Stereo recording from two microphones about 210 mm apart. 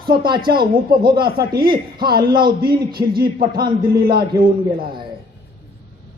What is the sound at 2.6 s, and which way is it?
A man's voice, 45° right (ahead or behind).